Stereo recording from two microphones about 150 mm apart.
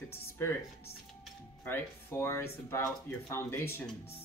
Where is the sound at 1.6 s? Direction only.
15° left (ahead or behind).